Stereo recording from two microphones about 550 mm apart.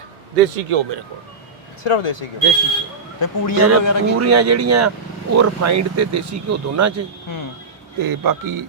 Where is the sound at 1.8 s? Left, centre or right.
Left.